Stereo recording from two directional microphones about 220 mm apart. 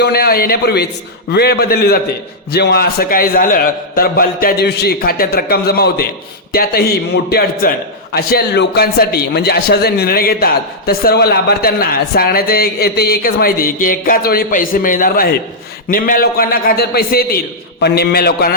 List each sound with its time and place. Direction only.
0.0 s a man's voice: 45° left (ahead or behind)